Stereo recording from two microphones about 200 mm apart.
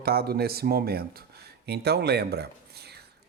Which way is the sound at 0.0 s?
50° right (ahead or behind).